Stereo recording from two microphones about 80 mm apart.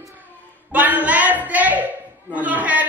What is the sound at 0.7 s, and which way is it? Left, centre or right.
A woman's voice, right.